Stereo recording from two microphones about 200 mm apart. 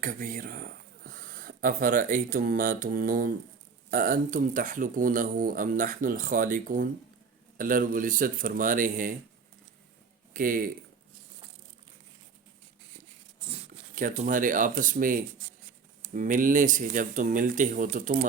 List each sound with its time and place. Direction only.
0.0 s speech: 45° right (ahead or behind)
10.3 s speech: 45° right (ahead or behind)
13.5 s speech: 40° right (ahead or behind)